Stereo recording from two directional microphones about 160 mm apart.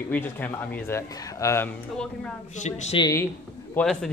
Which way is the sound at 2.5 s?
45° left (ahead or behind).